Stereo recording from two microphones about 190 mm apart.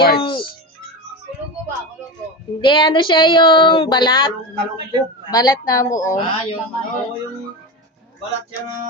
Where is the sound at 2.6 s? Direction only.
25° left (ahead or behind).